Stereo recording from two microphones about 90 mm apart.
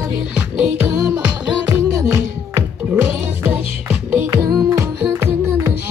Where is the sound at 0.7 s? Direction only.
10° right (ahead or behind).